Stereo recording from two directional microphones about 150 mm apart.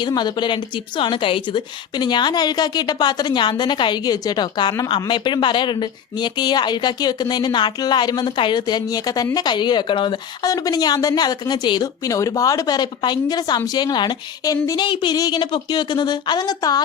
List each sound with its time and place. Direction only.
0.0 s a woman's voice: 30° left (ahead or behind)